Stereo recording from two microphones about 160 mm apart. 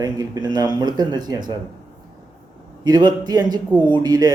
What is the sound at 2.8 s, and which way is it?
A man's voice, 25° right (ahead or behind).